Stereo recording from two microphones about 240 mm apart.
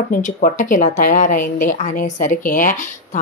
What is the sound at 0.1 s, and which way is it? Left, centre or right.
Speech, left.